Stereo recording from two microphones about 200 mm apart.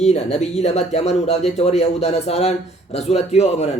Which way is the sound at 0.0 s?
35° left (ahead or behind).